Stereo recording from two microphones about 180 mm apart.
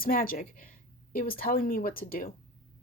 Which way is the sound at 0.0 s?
55° left (ahead or behind).